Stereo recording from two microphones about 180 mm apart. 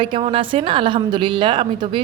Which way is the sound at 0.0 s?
30° right (ahead or behind).